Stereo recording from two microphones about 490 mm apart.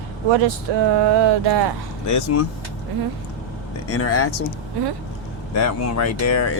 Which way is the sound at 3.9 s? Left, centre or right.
Left.